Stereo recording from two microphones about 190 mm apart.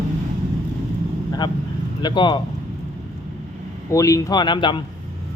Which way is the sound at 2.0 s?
20° left (ahead or behind).